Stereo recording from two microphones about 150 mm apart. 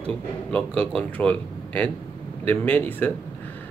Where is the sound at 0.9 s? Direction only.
10° left (ahead or behind).